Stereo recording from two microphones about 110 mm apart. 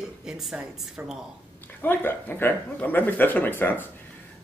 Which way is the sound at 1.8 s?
20° left (ahead or behind).